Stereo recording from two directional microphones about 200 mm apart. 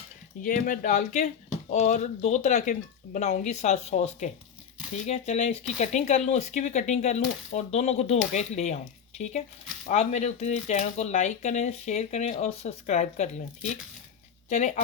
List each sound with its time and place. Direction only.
0.4 s speech: 45° left (ahead or behind)